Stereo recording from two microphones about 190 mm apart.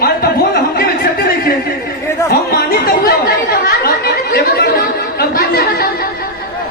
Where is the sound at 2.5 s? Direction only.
50° left (ahead or behind).